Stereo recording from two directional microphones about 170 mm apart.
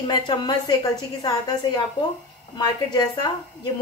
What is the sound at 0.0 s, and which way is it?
A woman's voice, 25° left (ahead or behind).